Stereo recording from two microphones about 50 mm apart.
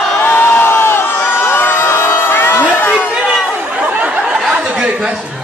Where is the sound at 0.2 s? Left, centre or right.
Left.